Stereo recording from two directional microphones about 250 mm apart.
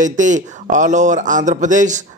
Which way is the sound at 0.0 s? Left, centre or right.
Right.